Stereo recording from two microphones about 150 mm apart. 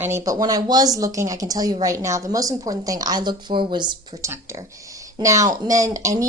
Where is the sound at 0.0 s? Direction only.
20° right (ahead or behind).